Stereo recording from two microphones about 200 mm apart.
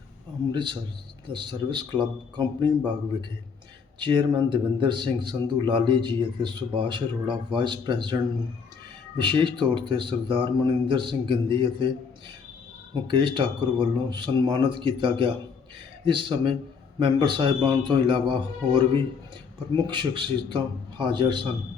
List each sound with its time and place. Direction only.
0.5 s speech: 20° right (ahead or behind)
12.9 s speech: 25° right (ahead or behind)